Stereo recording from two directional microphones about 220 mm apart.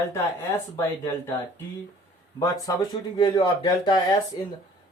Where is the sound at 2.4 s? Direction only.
15° left (ahead or behind).